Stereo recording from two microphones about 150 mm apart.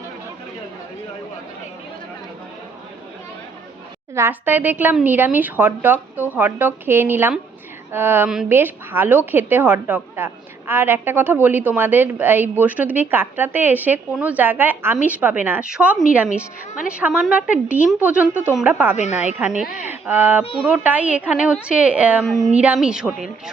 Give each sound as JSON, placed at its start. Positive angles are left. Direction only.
{"t": 4.1, "sound": "a woman's voice", "side_deg": -15}
{"t": 20.4, "sound": "speech", "side_deg": 40}
{"t": 20.7, "sound": "a woman's voice", "side_deg": -10}